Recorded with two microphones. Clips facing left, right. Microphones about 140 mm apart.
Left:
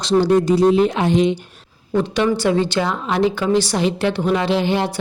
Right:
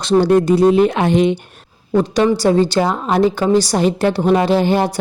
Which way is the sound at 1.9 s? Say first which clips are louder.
Right 4 dB; 40° right (ahead or behind).